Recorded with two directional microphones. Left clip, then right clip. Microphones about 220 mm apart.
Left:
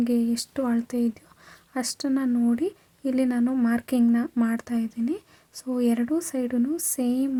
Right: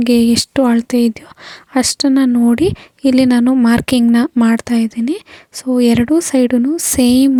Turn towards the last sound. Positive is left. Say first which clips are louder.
# right 15 dB
turn(degrees=-40)  # may be behind; listen again after turning